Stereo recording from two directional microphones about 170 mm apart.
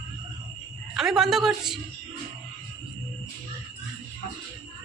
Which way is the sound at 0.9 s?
Centre (ahead or behind).